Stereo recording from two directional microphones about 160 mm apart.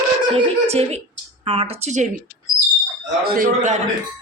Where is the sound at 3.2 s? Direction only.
65° right (ahead or behind).